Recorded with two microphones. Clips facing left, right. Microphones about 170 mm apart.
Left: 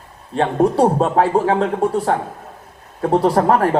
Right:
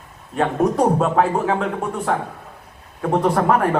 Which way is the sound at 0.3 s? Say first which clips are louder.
Left 3 dB; 30° left (ahead or behind).